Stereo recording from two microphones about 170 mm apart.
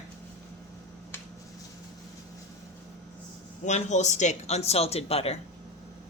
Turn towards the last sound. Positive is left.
turn(degrees=35)  # may be behind; listen again after turning